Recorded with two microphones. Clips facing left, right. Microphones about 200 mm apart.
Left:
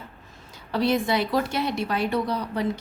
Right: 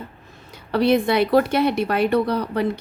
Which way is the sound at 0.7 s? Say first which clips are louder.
Right 5 dB; 60° right (ahead or behind).